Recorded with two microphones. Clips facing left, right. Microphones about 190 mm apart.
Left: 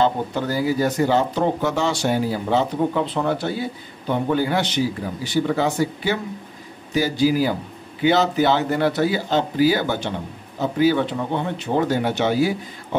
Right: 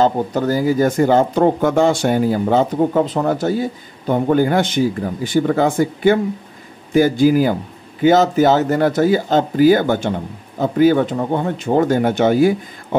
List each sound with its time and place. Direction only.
0.0 s speech: 45° right (ahead or behind)